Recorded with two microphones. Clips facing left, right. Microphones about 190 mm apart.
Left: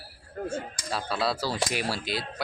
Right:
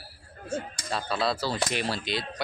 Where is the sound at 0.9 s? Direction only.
5° left (ahead or behind).